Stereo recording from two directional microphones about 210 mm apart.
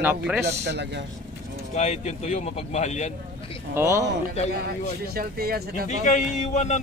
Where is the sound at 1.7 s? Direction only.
30° left (ahead or behind).